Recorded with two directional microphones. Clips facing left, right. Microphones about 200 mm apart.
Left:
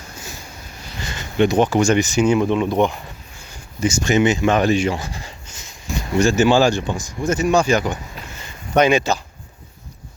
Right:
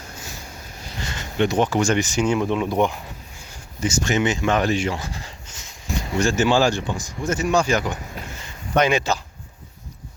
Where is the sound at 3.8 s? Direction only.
10° left (ahead or behind).